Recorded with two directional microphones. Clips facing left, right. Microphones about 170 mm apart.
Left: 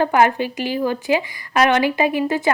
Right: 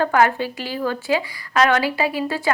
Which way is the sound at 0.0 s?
20° left (ahead or behind).